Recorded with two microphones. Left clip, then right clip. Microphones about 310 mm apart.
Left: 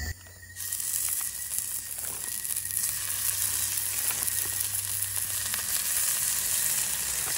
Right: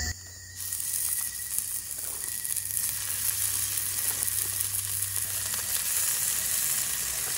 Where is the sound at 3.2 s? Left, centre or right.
Centre.